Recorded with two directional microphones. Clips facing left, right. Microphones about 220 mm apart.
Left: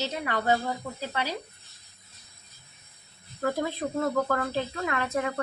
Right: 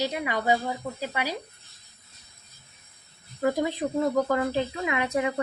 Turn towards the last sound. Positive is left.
turn(degrees=-15)  # may be behind; listen again after turning